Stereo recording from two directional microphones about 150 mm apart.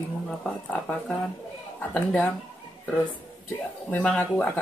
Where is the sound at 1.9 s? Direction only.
10° left (ahead or behind).